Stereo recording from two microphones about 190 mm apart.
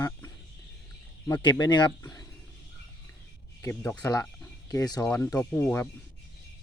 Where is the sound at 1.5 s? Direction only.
20° left (ahead or behind).